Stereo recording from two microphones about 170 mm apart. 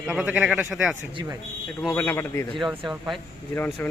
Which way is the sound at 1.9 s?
15° left (ahead or behind).